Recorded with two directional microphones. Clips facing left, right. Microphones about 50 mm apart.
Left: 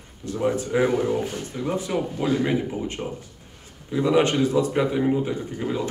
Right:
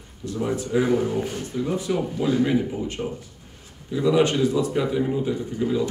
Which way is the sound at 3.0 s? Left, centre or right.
Centre.